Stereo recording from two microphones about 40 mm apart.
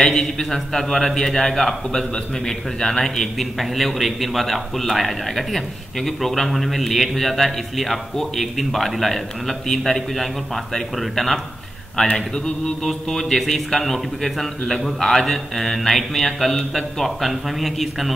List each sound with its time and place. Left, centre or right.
0.0 s a man's voice: centre
12.0 s speech: centre
12.8 s a man's voice: centre